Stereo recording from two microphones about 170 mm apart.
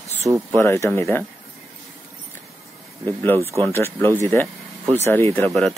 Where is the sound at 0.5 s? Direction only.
15° left (ahead or behind).